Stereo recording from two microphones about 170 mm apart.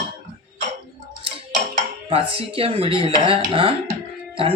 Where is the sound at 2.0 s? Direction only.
35° right (ahead or behind).